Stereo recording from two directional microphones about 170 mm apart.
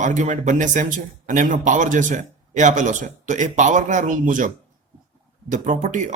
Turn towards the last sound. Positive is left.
turn(degrees=-45)  # may be behind; listen again after turning